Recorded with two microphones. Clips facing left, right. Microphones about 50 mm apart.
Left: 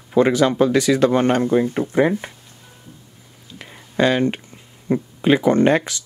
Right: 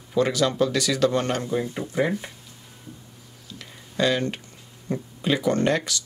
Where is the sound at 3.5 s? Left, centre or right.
Left.